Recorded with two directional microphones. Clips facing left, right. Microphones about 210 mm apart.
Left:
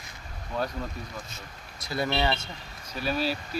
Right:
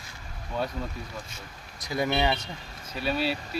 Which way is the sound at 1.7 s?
15° right (ahead or behind).